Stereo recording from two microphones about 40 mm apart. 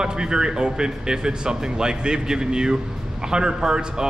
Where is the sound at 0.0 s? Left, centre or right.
Centre.